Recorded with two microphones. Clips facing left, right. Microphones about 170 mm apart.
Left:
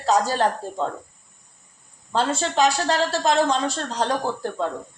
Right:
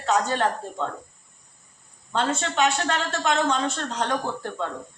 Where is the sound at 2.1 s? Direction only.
35° left (ahead or behind).